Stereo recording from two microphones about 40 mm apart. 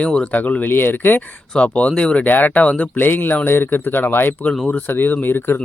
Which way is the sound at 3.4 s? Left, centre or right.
Left.